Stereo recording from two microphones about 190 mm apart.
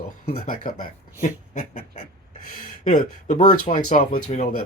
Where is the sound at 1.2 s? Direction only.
40° left (ahead or behind).